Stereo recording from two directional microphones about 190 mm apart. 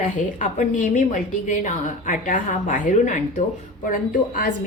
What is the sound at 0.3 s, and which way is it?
A woman's voice, 40° left (ahead or behind).